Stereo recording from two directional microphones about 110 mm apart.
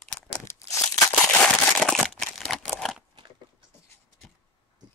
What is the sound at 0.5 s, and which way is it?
Crumpling, 25° left (ahead or behind).